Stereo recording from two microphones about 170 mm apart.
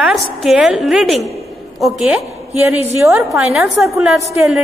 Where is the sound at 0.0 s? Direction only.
Centre (ahead or behind).